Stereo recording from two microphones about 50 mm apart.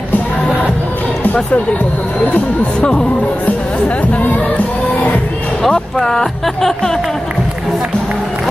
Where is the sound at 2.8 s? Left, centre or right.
Centre.